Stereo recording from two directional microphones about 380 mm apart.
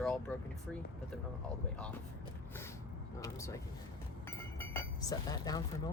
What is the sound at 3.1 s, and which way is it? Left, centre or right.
Speech, centre.